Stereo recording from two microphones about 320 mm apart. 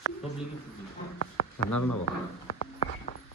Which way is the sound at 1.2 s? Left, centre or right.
Left.